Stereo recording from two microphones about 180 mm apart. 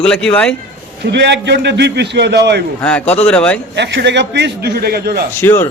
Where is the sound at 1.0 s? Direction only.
70° right (ahead or behind).